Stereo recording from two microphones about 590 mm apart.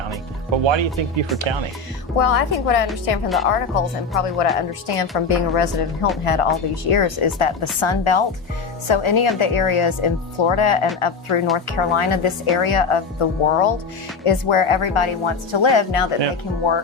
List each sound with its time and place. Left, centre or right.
0.6 s speech: right
2.1 s a woman's voice: left